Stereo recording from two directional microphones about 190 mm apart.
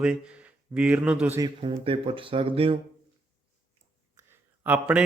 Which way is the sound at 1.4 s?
25° right (ahead or behind).